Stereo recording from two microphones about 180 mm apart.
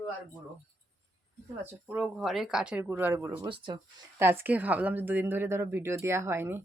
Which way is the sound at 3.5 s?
25° right (ahead or behind).